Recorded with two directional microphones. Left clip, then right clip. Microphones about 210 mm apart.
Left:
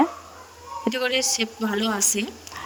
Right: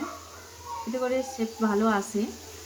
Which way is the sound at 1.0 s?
50° left (ahead or behind).